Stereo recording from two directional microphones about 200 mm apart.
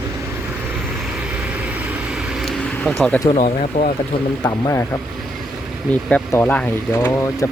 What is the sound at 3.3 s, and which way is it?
Speech, 35° left (ahead or behind).